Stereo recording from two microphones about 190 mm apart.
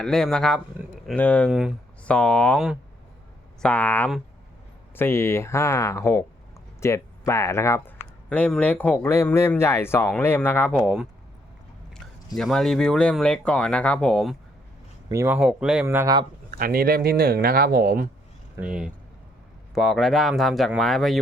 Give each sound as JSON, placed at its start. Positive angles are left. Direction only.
{"t": 0.0, "sound": "speech", "side_deg": 5}
{"t": 1.5, "sound": "speech", "side_deg": -5}
{"t": 15.1, "sound": "speech", "side_deg": -10}
{"t": 16.6, "sound": "speech", "side_deg": -50}
{"t": 18.5, "sound": "speech", "side_deg": -5}